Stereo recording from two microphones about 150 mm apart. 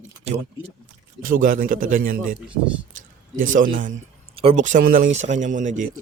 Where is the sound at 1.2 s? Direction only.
65° right (ahead or behind).